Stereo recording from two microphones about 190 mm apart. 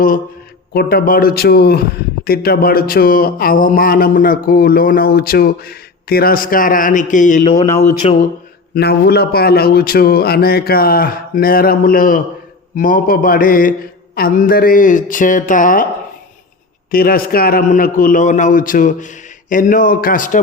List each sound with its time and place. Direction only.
0.7 s speech: 55° left (ahead or behind); by 8.2 s 35° left (ahead or behind)
8.7 s speech: 55° left (ahead or behind)
16.9 s speech: 50° left (ahead or behind)